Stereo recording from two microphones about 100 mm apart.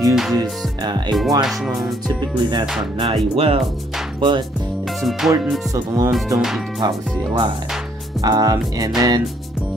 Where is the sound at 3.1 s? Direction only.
70° right (ahead or behind).